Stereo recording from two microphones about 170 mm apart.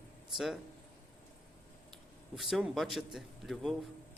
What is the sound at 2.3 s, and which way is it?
A man's voice, centre (ahead or behind).